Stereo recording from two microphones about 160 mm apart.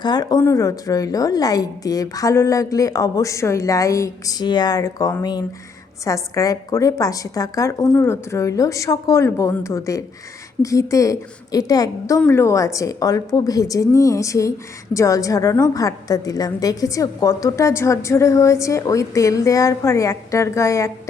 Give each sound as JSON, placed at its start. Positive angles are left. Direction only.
{"t": 0.0, "sound": "a woman's voice", "side_deg": 25}